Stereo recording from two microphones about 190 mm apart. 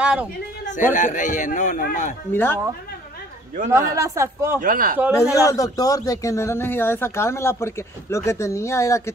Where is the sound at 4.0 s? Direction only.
15° right (ahead or behind).